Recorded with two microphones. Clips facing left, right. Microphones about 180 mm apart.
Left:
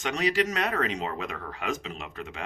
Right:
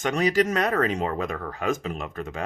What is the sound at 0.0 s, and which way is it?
Speech, 45° right (ahead or behind).